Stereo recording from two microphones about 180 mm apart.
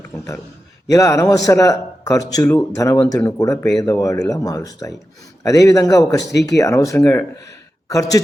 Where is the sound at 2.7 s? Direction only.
15° left (ahead or behind).